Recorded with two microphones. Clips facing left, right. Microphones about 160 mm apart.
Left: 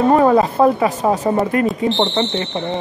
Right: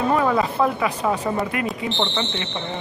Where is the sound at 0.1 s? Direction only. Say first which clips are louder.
Left 7 dB; 45° left (ahead or behind).